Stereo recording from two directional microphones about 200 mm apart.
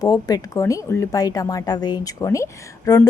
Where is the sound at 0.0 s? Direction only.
20° left (ahead or behind).